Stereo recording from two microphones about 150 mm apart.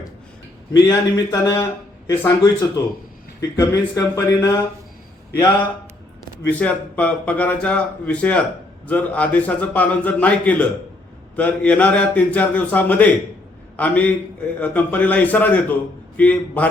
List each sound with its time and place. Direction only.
0.7 s speech: 25° left (ahead or behind)
6.4 s speech: 10° left (ahead or behind)